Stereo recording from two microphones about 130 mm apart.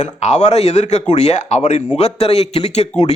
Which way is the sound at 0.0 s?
60° left (ahead or behind).